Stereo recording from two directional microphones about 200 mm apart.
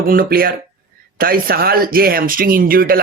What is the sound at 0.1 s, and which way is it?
Speech, 45° right (ahead or behind).